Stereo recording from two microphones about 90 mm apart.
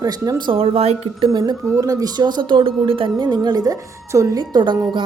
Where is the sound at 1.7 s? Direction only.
40° right (ahead or behind).